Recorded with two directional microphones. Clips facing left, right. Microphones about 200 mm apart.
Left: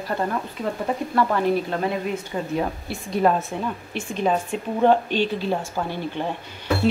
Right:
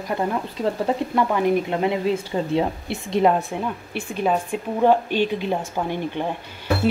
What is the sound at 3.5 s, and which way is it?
A woman's voice, 10° right (ahead or behind).